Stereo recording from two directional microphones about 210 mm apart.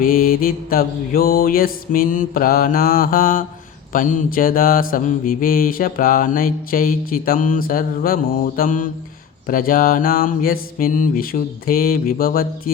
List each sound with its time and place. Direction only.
0.0 s mantra: 40° left (ahead or behind)